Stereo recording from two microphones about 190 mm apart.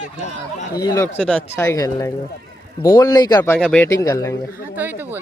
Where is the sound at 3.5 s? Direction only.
5° left (ahead or behind).